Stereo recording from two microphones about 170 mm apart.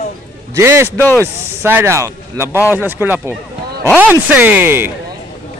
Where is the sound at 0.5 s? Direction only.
15° right (ahead or behind).